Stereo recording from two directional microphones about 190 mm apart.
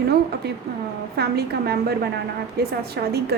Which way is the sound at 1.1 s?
55° right (ahead or behind).